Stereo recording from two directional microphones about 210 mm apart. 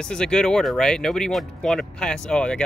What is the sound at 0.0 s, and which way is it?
Speech, 5° left (ahead or behind).